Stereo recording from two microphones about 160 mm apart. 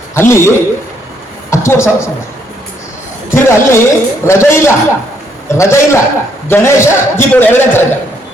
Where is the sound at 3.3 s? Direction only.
15° left (ahead or behind).